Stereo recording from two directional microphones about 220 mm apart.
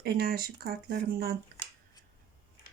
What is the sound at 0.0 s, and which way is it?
Speech, 45° right (ahead or behind).